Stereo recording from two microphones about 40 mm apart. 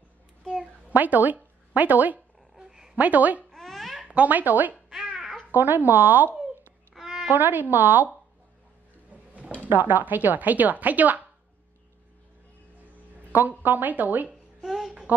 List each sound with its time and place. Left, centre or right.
0.8 s speech: right
2.6 s a sound: centre
3.0 s speech: right
3.5 s babbling: centre
4.3 s a woman's voice: right
7.0 s a sound: centre
7.2 s a woman's voice: right
9.1 s drawer open or close: right
9.8 s a woman's voice: right
13.3 s a woman's voice: right